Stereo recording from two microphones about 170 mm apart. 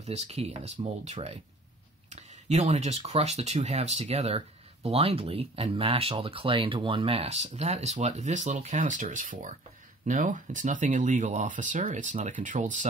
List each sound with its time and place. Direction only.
0.0 s speech: 40° right (ahead or behind)